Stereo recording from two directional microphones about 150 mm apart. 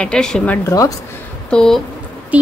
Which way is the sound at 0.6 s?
20° left (ahead or behind).